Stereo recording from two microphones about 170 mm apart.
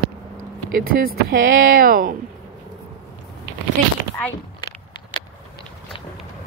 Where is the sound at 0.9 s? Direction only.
55° right (ahead or behind).